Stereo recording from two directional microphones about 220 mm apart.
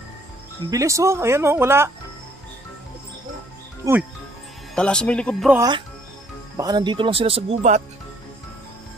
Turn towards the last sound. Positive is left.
turn(degrees=-30)  # may be behind; listen again after turning